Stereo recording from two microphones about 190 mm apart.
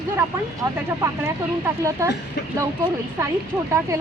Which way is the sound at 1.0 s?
15° right (ahead or behind).